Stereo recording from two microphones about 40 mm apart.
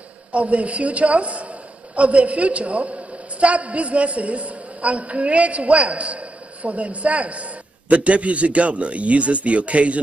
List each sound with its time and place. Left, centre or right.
0.3 s a man's voice: right